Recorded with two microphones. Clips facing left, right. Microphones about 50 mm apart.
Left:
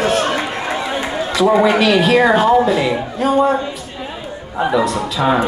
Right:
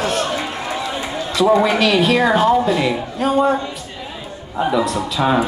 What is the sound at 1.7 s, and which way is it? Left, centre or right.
A man's voice, centre.